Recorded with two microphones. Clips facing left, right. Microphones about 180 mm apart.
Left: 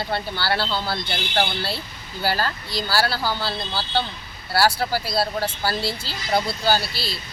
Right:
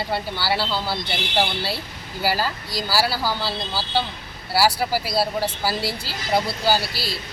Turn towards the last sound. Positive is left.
turn(degrees=-10)  # may be behind; listen again after turning